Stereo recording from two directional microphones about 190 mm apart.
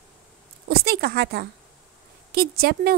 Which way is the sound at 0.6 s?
55° right (ahead or behind).